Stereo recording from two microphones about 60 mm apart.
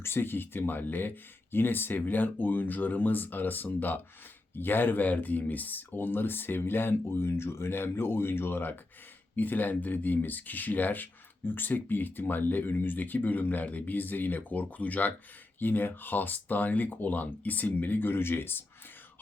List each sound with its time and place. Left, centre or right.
0.0 s speech: left